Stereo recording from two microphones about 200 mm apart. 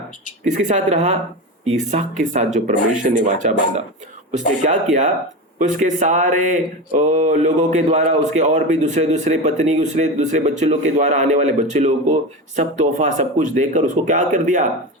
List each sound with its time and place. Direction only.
0.4 s a man's voice: 35° right (ahead or behind)